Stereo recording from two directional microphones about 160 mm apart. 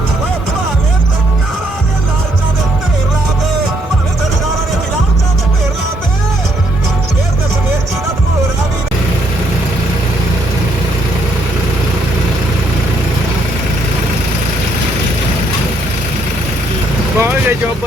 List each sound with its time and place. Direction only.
17.2 s vehicle: 15° right (ahead or behind)